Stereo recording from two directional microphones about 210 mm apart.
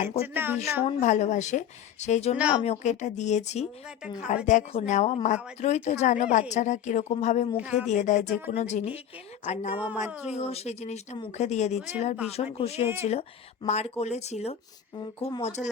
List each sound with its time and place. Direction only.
0.3 s speech: 10° right (ahead or behind)
0.9 s speech: 35° left (ahead or behind)
2.4 s speech: 5° right (ahead or behind)
2.6 s speech: 35° left (ahead or behind)
7.5 s a woman's voice: 5° right (ahead or behind)
7.9 s speech: 35° left (ahead or behind)
9.7 s a woman's voice: 5° right (ahead or behind)
10.3 s speech: 30° left (ahead or behind)
12.8 s a woman's voice: 10° right (ahead or behind)
13.1 s speech: 30° left (ahead or behind)